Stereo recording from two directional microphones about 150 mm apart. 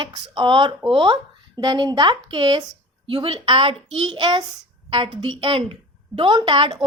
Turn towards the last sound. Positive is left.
turn(degrees=-35)  # may be behind; listen again after turning